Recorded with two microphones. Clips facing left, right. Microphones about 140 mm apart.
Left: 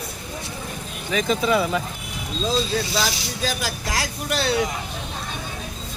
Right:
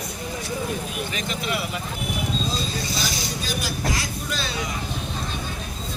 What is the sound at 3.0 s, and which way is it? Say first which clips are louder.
Speech: left 3 dB; 90° left.